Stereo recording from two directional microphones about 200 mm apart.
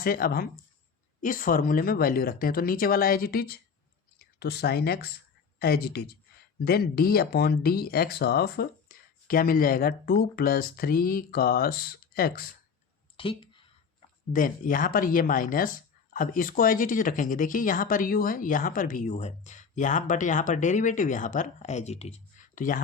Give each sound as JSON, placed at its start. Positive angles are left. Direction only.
{"t": 0.0, "sound": "speech", "side_deg": 45}
{"t": 13.1, "sound": "a sound", "side_deg": 25}
{"t": 14.3, "sound": "speech", "side_deg": 40}